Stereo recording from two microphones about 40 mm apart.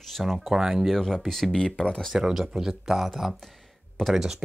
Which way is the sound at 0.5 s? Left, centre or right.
Centre.